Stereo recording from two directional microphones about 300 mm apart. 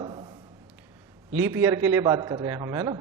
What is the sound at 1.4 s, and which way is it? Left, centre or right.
A man's voice, centre.